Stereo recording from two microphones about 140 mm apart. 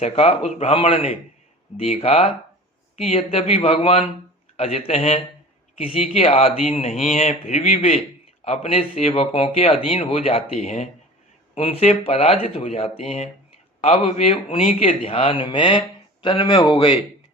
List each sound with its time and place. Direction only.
0.0 s speech: 50° left (ahead or behind)